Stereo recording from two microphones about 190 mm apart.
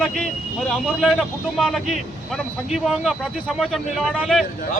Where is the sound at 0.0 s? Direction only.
Centre (ahead or behind).